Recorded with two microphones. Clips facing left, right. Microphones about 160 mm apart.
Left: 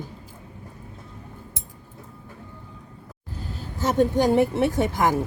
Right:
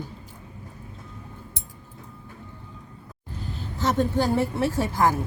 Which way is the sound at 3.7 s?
10° left (ahead or behind).